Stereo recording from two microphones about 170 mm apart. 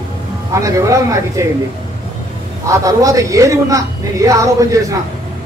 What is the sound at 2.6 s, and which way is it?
A woman's voice, 20° right (ahead or behind).